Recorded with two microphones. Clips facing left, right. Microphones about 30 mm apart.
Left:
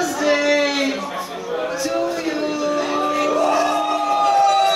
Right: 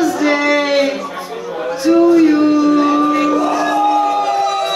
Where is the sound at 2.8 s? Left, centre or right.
Centre.